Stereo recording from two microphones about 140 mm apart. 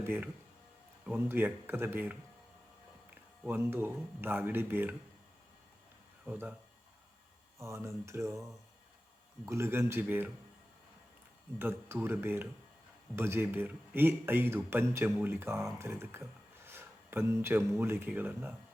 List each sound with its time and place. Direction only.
0.0 s speech: 15° right (ahead or behind)
3.4 s speech: 15° right (ahead or behind)
6.2 s speech: 15° right (ahead or behind)
7.6 s speech: 20° right (ahead or behind)
11.6 s speech: 15° right (ahead or behind)